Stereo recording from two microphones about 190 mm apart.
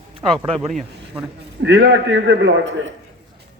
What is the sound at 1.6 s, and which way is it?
Speech, 65° right (ahead or behind).